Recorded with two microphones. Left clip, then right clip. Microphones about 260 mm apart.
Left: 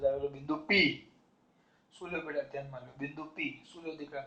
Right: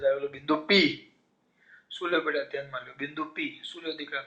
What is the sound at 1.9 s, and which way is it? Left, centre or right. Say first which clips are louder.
A man's voice: right 9 dB; right.